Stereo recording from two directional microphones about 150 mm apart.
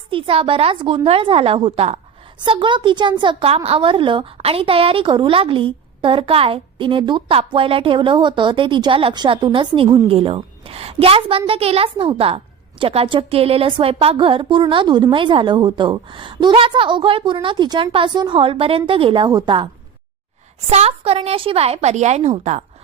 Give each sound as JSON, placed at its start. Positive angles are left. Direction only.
{"t": 0.1, "sound": "a woman's voice", "side_deg": -35}
{"t": 2.4, "sound": "a woman's voice", "side_deg": -30}
{"t": 20.7, "sound": "a woman's voice", "side_deg": -45}